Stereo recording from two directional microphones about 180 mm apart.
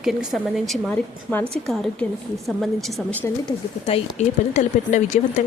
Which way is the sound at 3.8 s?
35° left (ahead or behind).